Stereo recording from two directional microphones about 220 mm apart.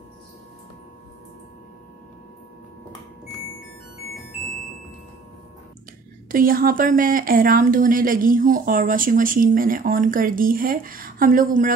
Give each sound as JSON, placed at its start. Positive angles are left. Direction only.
{"t": 6.3, "sound": "speech", "side_deg": -40}